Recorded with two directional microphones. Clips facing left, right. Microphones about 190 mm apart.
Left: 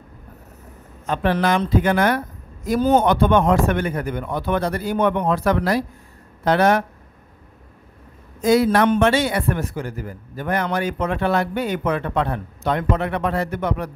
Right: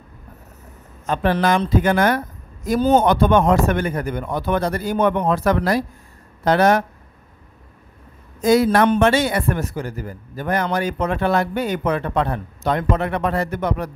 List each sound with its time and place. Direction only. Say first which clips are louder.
1.0 s a man's voice: right 1 dB; 40° right (ahead or behind)
8.4 s a man's voice: right 1 dB; 45° right (ahead or behind)